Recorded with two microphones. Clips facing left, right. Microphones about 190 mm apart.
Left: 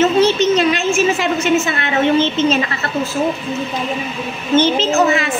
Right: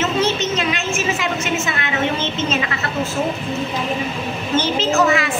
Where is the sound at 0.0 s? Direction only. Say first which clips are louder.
Left 7 dB; 35° left (ahead or behind).